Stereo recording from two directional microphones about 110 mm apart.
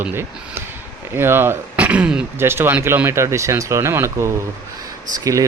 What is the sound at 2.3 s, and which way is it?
Speech, 20° right (ahead or behind).